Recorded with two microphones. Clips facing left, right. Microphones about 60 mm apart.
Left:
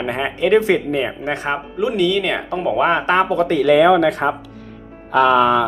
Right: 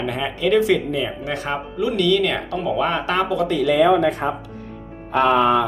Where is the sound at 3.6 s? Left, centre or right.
Left.